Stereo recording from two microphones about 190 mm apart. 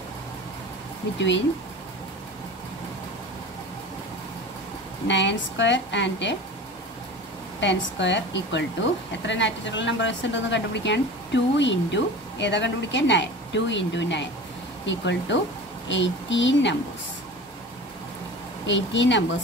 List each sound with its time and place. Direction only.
5.0 s a woman's voice: 70° left (ahead or behind)
7.6 s a woman's voice: 70° left (ahead or behind)
18.7 s a woman's voice: 70° left (ahead or behind)